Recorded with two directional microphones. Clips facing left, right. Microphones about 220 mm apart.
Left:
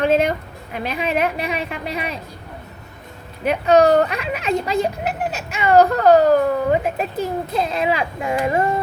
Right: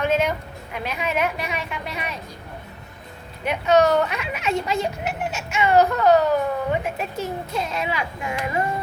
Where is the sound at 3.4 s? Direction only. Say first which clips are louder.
Left 4 dB; 35° left (ahead or behind).